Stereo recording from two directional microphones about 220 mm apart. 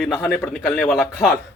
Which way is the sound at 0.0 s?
Centre (ahead or behind).